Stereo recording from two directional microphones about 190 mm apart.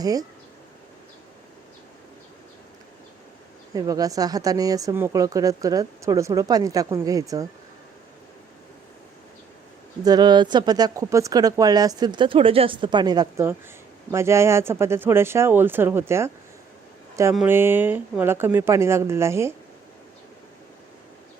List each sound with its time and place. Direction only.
0.0 s speech: 20° right (ahead or behind)
3.8 s speech: 20° right (ahead or behind)
10.0 s speech: 20° right (ahead or behind)
17.3 s speech: 10° right (ahead or behind)